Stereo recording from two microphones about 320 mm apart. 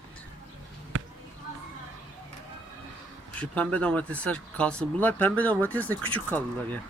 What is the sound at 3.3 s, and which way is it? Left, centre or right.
Speech, centre.